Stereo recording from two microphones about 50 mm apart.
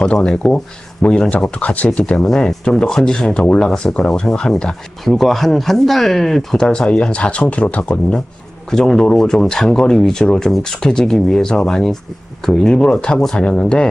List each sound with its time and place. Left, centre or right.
0.0 s speech: centre
1.0 s speech: left
2.2 s speech: centre
5.0 s speech: centre; by 8.2 s left
8.7 s speech: centre